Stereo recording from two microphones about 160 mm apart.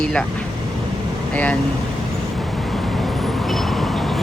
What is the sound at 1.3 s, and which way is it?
Speech, 10° left (ahead or behind).